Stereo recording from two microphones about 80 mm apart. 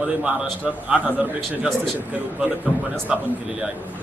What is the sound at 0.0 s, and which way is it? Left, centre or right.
A man's voice, centre.